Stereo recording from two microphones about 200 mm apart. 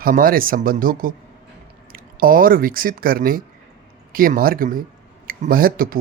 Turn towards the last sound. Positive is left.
turn(degrees=-45)  # may be behind; listen again after turning